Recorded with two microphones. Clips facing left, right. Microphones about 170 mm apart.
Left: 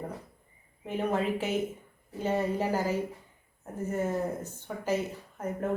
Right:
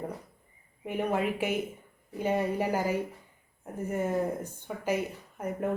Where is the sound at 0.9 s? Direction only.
10° right (ahead or behind).